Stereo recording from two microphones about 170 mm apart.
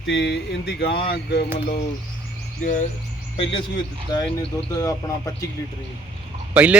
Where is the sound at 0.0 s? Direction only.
90° left; by 1.5 s 70° left (ahead or behind).